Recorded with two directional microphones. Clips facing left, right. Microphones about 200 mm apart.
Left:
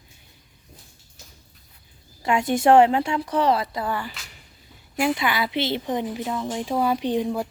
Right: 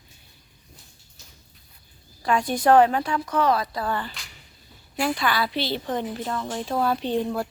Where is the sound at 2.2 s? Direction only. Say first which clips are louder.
Left 2 dB; 25° left (ahead or behind).